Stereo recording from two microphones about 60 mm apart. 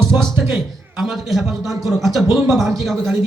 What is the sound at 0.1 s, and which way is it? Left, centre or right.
Speech, right.